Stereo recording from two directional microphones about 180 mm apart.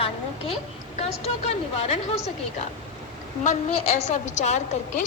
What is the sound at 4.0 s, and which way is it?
A woman's voice, 40° left (ahead or behind).